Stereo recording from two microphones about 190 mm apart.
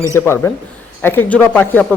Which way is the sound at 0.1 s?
15° left (ahead or behind).